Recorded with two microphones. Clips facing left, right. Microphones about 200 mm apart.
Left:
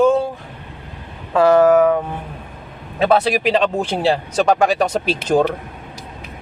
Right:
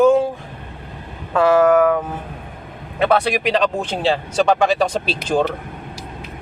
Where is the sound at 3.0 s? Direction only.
5° left (ahead or behind).